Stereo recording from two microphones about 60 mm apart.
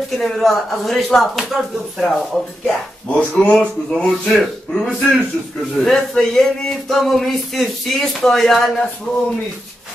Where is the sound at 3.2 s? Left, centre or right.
Left.